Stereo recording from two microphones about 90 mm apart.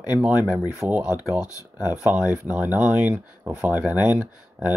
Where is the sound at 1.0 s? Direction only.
40° left (ahead or behind).